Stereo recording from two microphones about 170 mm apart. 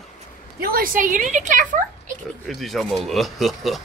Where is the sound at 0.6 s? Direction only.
60° right (ahead or behind).